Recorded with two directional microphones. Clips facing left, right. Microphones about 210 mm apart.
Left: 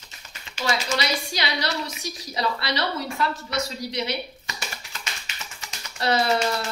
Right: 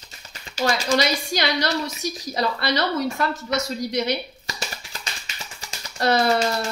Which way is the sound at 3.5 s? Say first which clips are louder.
Right 4 dB; 45° right (ahead or behind).